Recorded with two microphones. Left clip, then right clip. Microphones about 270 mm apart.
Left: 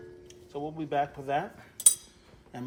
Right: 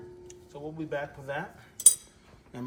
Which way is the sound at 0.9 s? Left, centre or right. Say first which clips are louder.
Left 6 dB; left.